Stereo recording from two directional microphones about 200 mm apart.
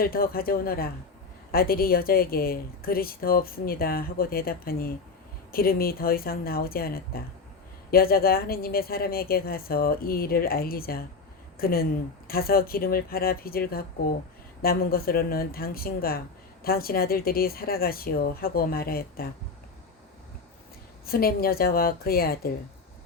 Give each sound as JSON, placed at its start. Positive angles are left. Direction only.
{"t": 0.0, "sound": "a woman's voice", "side_deg": 50}
{"t": 21.1, "sound": "a woman's voice", "side_deg": 50}